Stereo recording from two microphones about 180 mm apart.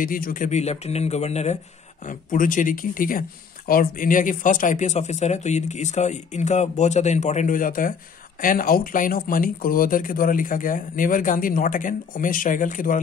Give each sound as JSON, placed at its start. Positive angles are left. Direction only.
{"t": 0.0, "sound": "speech", "side_deg": 50}